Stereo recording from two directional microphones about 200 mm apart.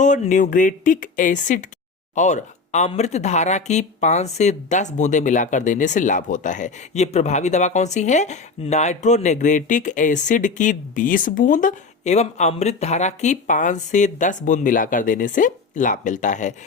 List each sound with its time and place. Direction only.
0.0 s speech: 40° left (ahead or behind)